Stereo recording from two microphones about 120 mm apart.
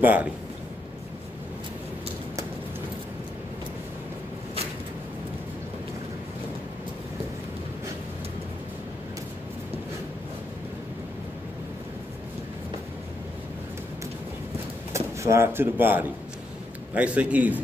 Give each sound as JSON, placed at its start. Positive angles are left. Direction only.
{"t": 0.0, "sound": "a man's voice", "side_deg": -15}
{"t": 14.9, "sound": "a man's voice", "side_deg": -25}